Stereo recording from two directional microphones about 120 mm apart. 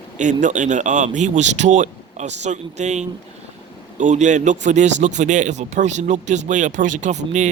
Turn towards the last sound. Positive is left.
turn(degrees=-80)